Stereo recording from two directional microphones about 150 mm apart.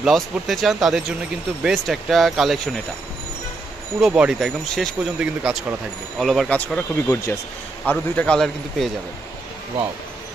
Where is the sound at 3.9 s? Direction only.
5° right (ahead or behind).